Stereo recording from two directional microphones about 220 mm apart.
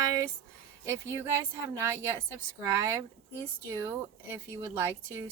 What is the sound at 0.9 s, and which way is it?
Speech, 10° right (ahead or behind).